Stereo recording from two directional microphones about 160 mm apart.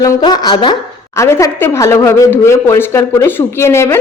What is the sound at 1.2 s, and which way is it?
A woman's voice, 20° left (ahead or behind).